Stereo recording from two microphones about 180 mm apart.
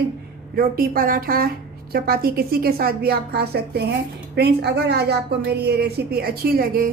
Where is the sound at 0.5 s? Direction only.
55° right (ahead or behind).